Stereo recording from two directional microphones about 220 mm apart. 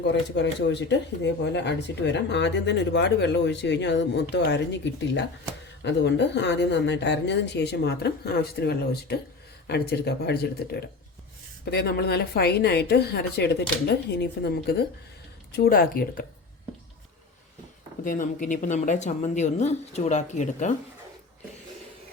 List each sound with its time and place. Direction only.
0.1 s speech: 50° left (ahead or behind)
18.0 s speech: 35° left (ahead or behind)